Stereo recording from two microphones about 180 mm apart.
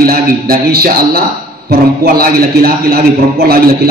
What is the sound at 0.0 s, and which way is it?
A man's voice, 55° right (ahead or behind).